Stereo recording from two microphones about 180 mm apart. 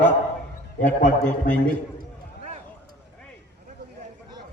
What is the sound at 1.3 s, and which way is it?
Speech, 5° left (ahead or behind).